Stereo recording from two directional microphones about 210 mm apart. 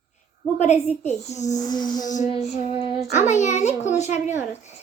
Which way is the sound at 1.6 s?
20° left (ahead or behind).